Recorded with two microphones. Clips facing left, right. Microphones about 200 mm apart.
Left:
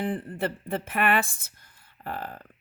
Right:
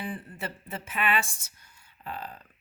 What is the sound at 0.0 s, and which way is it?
Speech, 55° left (ahead or behind).